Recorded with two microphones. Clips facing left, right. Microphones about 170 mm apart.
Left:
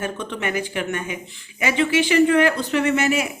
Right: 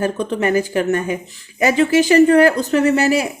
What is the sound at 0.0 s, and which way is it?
Speech, 35° right (ahead or behind).